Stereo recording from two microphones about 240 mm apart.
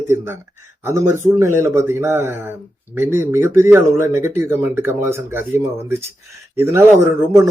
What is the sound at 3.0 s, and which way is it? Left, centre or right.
Speech, left.